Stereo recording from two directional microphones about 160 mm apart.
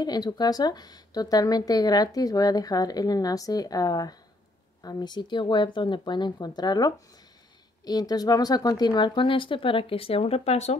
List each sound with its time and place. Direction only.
0.0 s speech: 25° left (ahead or behind); by 10.8 s 45° left (ahead or behind)